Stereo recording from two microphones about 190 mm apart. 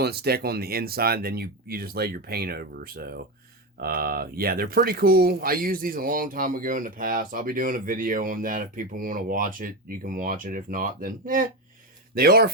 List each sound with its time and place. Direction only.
0.0 s speech: 55° right (ahead or behind)